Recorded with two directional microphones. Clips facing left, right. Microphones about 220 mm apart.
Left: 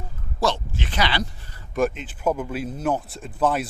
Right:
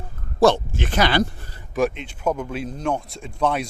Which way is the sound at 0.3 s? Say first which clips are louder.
Right 8 dB; 55° right (ahead or behind).